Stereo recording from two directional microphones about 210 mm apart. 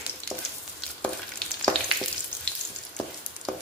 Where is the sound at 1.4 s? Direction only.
5° left (ahead or behind).